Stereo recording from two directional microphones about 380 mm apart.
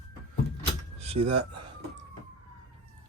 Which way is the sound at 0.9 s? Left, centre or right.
Centre.